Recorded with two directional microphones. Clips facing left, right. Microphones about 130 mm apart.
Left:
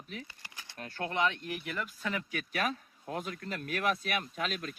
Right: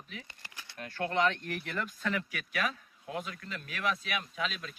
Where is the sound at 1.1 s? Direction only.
15° left (ahead or behind).